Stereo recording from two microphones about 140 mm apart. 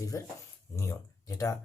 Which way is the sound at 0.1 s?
25° left (ahead or behind).